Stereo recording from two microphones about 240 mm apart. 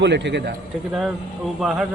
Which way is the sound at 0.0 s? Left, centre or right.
Right.